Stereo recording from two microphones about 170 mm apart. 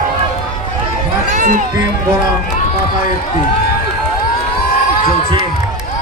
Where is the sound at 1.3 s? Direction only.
50° right (ahead or behind).